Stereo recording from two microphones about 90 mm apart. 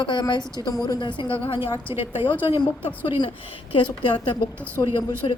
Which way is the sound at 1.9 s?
30° right (ahead or behind).